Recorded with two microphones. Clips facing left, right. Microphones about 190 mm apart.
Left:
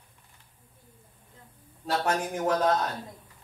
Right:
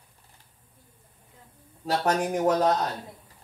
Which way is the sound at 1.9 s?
35° right (ahead or behind).